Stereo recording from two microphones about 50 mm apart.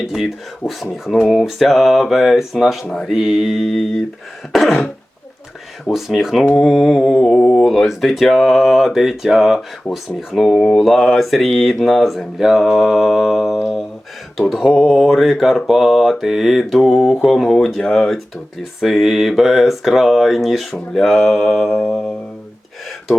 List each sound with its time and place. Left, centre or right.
0.1 s speech: centre
5.9 s speech: centre
6.5 s mantra: centre
7.6 s speech: centre
13.6 s a sound: centre
14.3 s speech: centre
17.9 s mantra: centre
18.8 s speech: centre
21.7 s mantra: left